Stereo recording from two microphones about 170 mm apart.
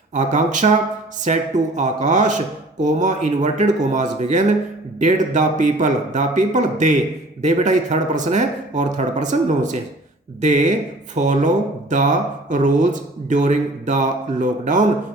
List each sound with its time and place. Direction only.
0.1 s speech: 45° right (ahead or behind)